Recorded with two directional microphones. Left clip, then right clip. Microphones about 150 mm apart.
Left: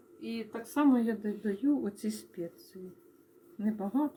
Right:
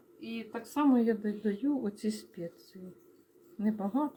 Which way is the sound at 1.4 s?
40° right (ahead or behind).